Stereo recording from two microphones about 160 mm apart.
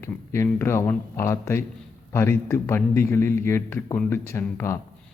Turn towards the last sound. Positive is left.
turn(degrees=15)  # may be behind; listen again after turning